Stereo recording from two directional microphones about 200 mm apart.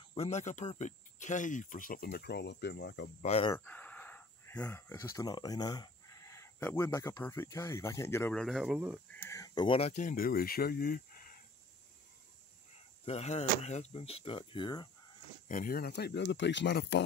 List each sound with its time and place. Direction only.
0.1 s speech: 30° left (ahead or behind); by 3.1 s 55° left (ahead or behind)
3.2 s speech: 30° left (ahead or behind)
3.5 s speech: 10° left (ahead or behind)
9.1 s speech: 15° left (ahead or behind); by 11.4 s 45° left (ahead or behind)
13.0 s speech: 35° left (ahead or behind)
15.4 s speech: 40° left (ahead or behind); by 17.0 s 60° left (ahead or behind)